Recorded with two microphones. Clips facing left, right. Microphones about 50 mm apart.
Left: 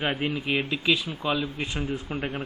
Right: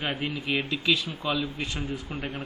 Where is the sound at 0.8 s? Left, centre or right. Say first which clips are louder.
Left 1 dB; centre.